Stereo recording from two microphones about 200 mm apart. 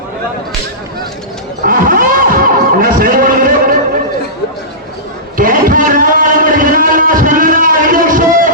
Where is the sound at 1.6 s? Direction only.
45° right (ahead or behind).